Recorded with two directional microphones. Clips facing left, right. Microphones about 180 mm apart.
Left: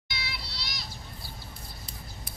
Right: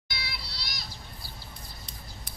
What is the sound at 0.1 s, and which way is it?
Children playing, 40° right (ahead or behind).